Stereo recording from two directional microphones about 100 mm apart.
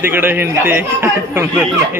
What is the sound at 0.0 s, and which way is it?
Speech, 20° right (ahead or behind).